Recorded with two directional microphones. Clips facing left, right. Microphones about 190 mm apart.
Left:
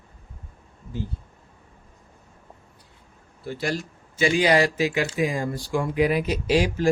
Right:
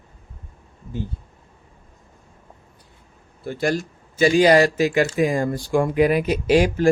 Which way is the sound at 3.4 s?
50° right (ahead or behind).